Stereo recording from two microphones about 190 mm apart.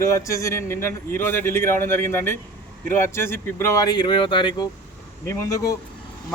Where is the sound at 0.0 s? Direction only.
15° left (ahead or behind).